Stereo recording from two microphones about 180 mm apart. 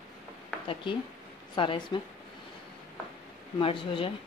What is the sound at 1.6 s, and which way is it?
Speech, 25° left (ahead or behind).